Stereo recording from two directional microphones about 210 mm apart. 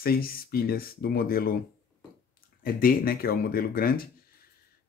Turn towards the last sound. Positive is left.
turn(degrees=45)  # may be behind; listen again after turning